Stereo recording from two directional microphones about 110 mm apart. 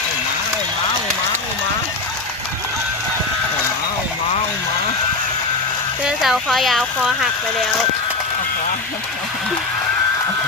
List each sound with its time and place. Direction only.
6.1 s speech: centre (ahead or behind)